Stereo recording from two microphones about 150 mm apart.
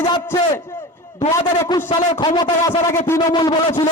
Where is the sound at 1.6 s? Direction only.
30° left (ahead or behind).